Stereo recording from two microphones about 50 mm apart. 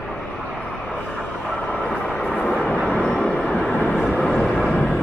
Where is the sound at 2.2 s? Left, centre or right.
Left.